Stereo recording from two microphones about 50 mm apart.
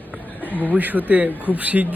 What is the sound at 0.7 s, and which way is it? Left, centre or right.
Speech, right.